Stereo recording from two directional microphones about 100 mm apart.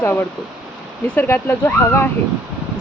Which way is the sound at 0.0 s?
20° left (ahead or behind).